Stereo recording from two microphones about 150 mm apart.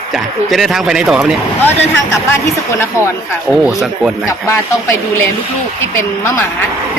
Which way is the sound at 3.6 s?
Centre (ahead or behind).